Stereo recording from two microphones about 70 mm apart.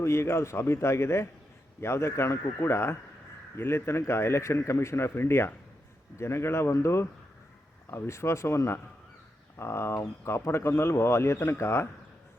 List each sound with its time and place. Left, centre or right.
0.0 s speech: left